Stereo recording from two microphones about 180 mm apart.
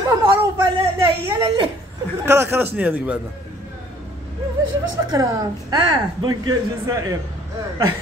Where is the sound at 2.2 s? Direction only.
15° right (ahead or behind).